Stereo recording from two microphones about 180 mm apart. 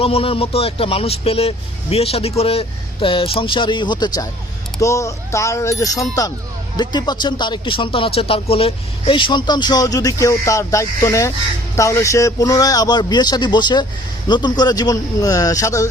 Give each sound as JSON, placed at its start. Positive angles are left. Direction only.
{"t": 0.0, "sound": "speech", "side_deg": 30}